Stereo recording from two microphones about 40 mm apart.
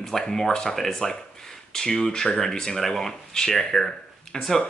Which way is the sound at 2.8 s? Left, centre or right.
Centre.